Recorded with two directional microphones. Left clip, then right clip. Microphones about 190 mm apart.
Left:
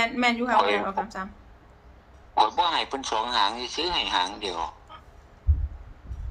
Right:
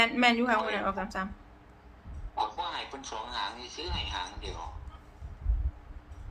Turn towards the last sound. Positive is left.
turn(degrees=50)  # may be behind; listen again after turning